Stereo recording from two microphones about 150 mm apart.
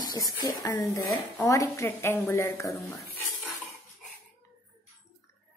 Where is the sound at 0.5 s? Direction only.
25° left (ahead or behind).